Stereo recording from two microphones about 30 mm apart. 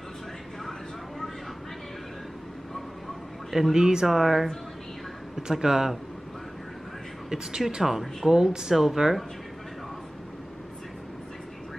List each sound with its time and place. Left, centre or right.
3.7 s speech: right
4.1 s speech: centre
5.5 s speech: centre
7.3 s speech: right
7.8 s speech: centre
8.3 s speech: centre